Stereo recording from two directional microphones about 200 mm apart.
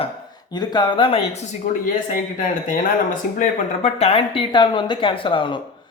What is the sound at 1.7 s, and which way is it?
Speech, 40° left (ahead or behind).